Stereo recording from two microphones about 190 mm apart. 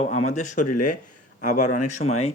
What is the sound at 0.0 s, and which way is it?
Speech, 35° left (ahead or behind).